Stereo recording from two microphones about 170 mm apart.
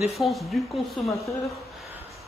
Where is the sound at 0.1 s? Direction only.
Centre (ahead or behind).